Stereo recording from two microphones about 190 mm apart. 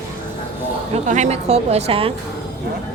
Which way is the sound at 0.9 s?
40° right (ahead or behind).